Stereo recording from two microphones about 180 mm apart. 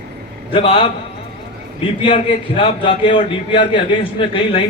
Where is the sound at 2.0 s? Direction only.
30° left (ahead or behind).